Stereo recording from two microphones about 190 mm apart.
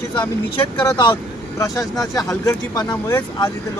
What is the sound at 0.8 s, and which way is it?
Speech, 25° left (ahead or behind).